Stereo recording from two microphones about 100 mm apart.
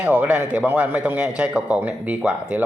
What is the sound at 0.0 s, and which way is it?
Speech, 15° right (ahead or behind).